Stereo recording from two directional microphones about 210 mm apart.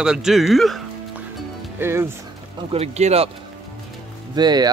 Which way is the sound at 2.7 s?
30° right (ahead or behind).